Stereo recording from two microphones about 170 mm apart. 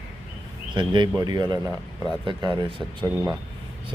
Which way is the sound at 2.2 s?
30° right (ahead or behind).